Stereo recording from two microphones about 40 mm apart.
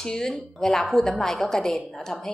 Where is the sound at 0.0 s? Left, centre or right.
Centre.